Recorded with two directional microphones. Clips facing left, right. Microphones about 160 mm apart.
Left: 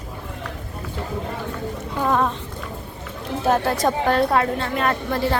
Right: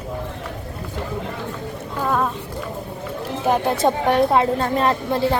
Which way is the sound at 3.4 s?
15° right (ahead or behind).